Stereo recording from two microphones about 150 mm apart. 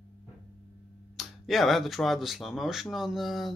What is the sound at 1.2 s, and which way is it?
Speech, centre (ahead or behind).